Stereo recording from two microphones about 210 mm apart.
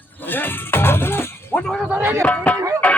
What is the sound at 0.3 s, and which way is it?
Music, 10° left (ahead or behind).